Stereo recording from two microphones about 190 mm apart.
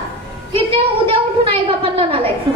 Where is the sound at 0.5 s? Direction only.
25° right (ahead or behind).